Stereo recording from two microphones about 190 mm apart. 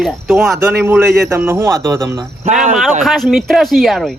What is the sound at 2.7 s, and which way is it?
Speech, centre (ahead or behind).